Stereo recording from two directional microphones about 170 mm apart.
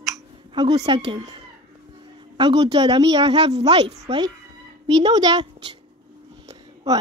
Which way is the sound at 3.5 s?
35° right (ahead or behind).